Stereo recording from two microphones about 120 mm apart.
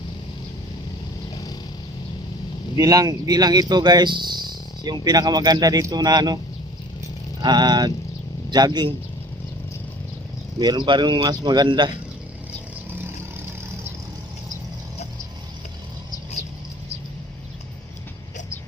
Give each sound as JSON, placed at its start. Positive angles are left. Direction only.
{"t": 2.7, "sound": "speech", "side_deg": -30}
{"t": 7.4, "sound": "speech", "side_deg": -35}
{"t": 10.6, "sound": "speech", "side_deg": -40}